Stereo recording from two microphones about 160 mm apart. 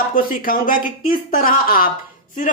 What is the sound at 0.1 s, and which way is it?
Speech, 60° left (ahead or behind).